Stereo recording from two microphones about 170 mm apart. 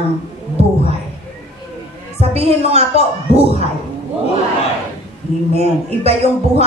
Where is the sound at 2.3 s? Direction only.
35° right (ahead or behind).